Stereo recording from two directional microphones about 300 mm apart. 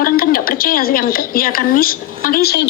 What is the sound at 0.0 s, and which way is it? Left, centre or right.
A woman's voice, left.